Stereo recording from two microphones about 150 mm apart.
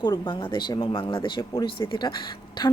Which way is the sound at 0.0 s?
30° left (ahead or behind).